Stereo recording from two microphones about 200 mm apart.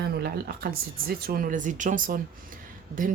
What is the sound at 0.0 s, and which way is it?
Speech, 55° right (ahead or behind).